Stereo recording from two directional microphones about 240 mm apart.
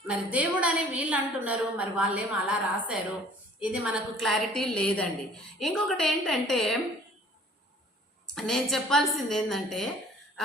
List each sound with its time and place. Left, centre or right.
0.1 s a woman's voice: centre
8.4 s a woman's voice: centre